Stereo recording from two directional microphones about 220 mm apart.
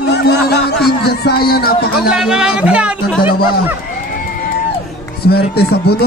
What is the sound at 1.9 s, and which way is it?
Speech, 5° right (ahead or behind).